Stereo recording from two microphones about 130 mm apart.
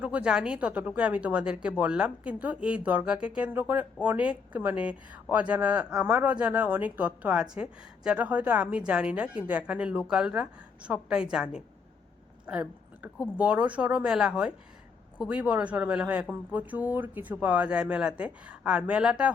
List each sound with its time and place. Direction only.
0.0 s a woman's voice: 10° right (ahead or behind)
12.5 s a sound: 10° right (ahead or behind)
13.3 s a woman's voice: 10° right (ahead or behind)